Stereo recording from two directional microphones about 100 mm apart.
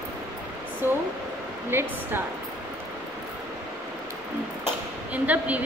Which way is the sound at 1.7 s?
25° right (ahead or behind).